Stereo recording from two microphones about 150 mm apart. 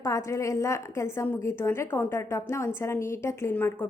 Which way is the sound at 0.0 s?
20° left (ahead or behind).